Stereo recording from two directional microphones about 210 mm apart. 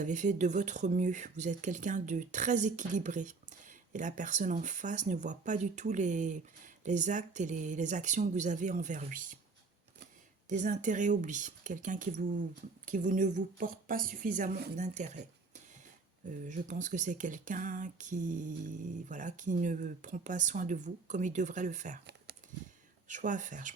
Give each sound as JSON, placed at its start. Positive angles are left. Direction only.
{"t": 0.0, "sound": "speech", "side_deg": -35}
{"t": 10.5, "sound": "speech", "side_deg": -35}
{"t": 23.0, "sound": "speech", "side_deg": -35}